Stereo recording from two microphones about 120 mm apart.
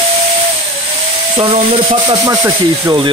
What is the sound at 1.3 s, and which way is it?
Stir, 50° right (ahead or behind).